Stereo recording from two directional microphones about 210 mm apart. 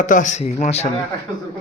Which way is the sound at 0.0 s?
35° left (ahead or behind).